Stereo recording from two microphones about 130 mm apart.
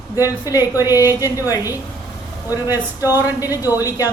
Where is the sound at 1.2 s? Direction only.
25° left (ahead or behind).